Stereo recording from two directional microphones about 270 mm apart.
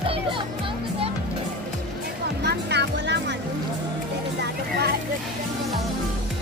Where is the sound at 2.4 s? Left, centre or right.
Right.